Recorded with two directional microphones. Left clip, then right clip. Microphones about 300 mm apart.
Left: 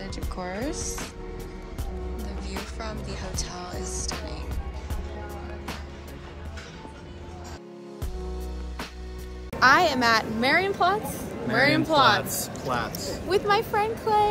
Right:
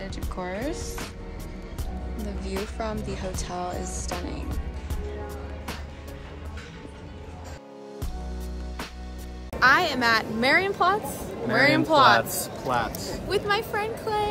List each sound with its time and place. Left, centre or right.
0.0 s speech: centre
2.1 s music: centre
9.6 s speech: centre
12.2 s speech: right
13.3 s music: centre